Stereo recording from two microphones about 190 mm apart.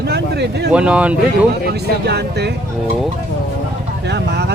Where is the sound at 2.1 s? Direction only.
60° right (ahead or behind).